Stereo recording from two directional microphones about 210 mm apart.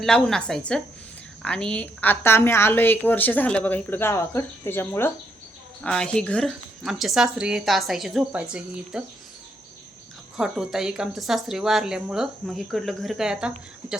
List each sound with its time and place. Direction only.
0.0 s speech: 5° left (ahead or behind)
10.3 s speech: centre (ahead or behind)